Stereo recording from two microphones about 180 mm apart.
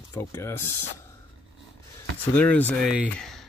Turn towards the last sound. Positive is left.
turn(degrees=0)  # may be behind; listen again after turning